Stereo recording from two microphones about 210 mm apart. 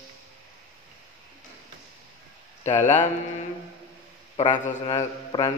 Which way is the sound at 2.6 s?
35° left (ahead or behind).